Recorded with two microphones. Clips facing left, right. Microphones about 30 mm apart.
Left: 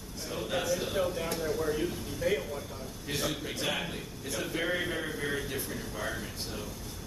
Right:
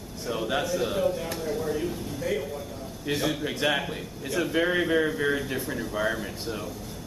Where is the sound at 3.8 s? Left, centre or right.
Centre.